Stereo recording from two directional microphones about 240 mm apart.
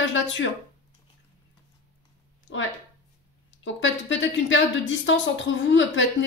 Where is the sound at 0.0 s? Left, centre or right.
Left.